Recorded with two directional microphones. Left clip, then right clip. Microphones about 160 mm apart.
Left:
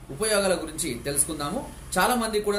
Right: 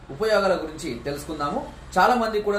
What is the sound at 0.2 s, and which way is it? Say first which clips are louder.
Speech: right 3 dB; 25° left (ahead or behind).